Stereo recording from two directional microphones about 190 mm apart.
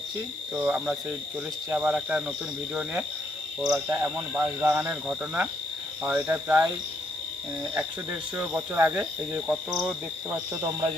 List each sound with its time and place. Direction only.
0.5 s speech: 5° right (ahead or behind)
3.7 s speech: 15° right (ahead or behind)
8.4 s speech: 10° right (ahead or behind)
9.8 s cricket: 5° right (ahead or behind)
10.6 s speech: 20° right (ahead or behind)